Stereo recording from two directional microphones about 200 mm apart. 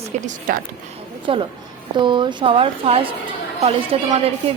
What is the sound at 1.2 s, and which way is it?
A woman's voice, 25° right (ahead or behind).